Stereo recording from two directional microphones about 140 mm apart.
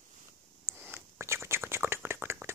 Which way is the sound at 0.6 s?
15° right (ahead or behind).